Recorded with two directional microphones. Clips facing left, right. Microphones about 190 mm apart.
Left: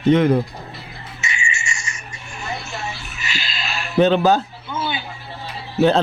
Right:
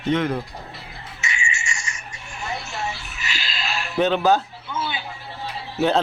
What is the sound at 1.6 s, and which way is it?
Music, 5° left (ahead or behind).